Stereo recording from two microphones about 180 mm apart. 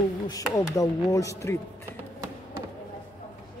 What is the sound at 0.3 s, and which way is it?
Speech, 15° left (ahead or behind).